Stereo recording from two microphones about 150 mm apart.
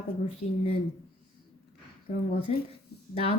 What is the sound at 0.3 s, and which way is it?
Speech, 45° left (ahead or behind).